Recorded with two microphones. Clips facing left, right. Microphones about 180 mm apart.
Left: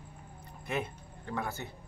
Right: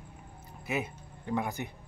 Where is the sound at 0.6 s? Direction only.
10° right (ahead or behind).